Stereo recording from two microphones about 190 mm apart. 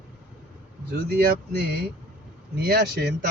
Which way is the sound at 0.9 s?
50° right (ahead or behind).